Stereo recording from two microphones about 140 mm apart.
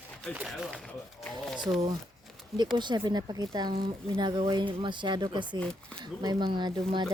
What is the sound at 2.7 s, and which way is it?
Speech, 35° right (ahead or behind).